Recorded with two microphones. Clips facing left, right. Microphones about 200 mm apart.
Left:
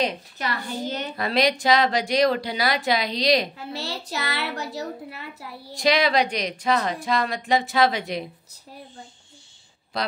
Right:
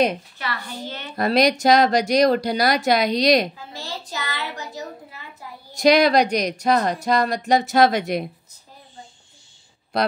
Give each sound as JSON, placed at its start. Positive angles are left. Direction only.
{"t": 0.4, "sound": "a child's voice", "side_deg": 45}
{"t": 1.1, "sound": "speech", "side_deg": -40}
{"t": 3.5, "sound": "a child's voice", "side_deg": 70}
{"t": 5.8, "sound": "speech", "side_deg": -45}